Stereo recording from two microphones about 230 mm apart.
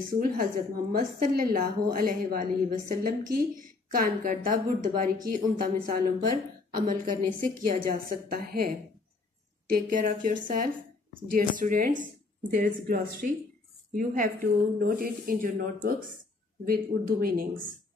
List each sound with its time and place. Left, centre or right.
0.1 s a woman's voice: right